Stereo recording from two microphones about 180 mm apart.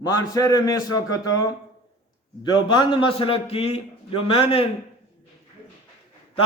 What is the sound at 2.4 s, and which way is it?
A man's voice, 25° left (ahead or behind).